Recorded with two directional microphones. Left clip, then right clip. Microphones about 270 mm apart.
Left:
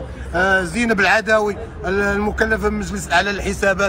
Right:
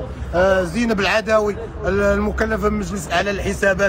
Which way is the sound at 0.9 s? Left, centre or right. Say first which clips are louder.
Left 2 dB; centre.